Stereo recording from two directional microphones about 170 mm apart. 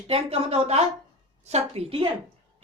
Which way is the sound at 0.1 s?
35° right (ahead or behind).